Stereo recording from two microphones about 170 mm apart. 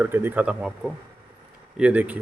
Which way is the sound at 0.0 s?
10° right (ahead or behind).